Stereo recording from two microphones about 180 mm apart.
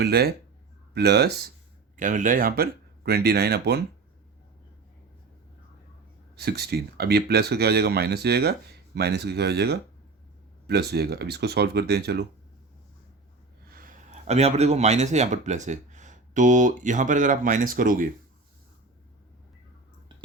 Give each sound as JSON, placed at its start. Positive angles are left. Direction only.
{"t": 0.0, "sound": "speech", "side_deg": -60}
{"t": 2.0, "sound": "speech", "side_deg": -45}
{"t": 6.3, "sound": "speech", "side_deg": -65}
{"t": 13.7, "sound": "a man's voice", "side_deg": -50}